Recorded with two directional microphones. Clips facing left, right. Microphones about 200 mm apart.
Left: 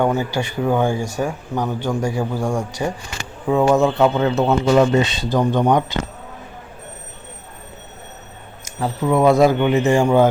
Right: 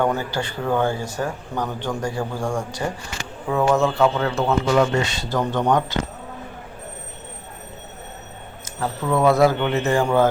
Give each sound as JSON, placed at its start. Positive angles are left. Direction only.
{"t": 0.0, "sound": "speech", "side_deg": 10}
{"t": 8.8, "sound": "speech", "side_deg": 20}